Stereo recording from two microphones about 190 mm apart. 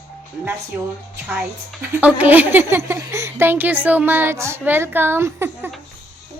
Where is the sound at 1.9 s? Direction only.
10° right (ahead or behind).